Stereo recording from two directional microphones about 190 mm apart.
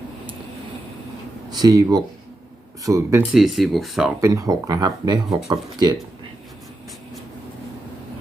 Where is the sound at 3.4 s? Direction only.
Centre (ahead or behind).